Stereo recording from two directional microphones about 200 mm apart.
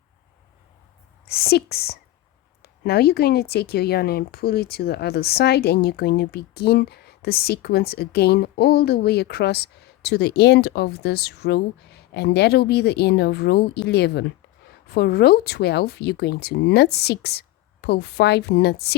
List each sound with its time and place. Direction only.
1.3 s speech: 50° left (ahead or behind)